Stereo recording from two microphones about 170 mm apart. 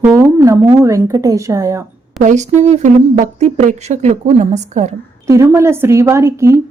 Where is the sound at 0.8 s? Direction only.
15° right (ahead or behind).